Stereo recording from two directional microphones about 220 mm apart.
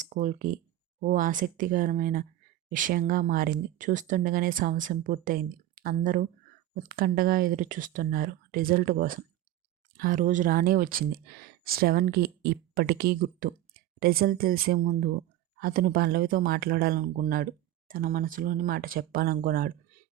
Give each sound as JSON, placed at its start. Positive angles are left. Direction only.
{"t": 0.0, "sound": "speech", "side_deg": -35}